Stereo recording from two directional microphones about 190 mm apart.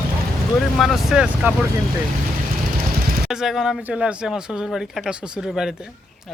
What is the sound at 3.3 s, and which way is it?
Speech, centre (ahead or behind).